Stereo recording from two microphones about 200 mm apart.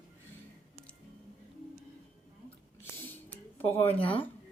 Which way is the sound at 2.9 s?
10° left (ahead or behind).